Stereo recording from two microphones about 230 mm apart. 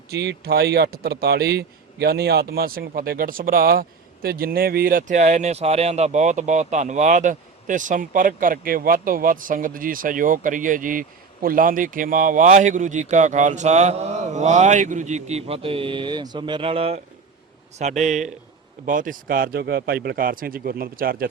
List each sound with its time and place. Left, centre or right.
0.1 s speech: right